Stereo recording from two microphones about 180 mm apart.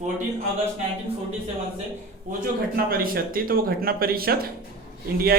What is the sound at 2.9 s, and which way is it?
Speech, 55° right (ahead or behind).